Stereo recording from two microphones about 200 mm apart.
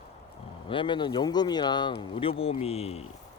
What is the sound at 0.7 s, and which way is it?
Speech, 25° left (ahead or behind).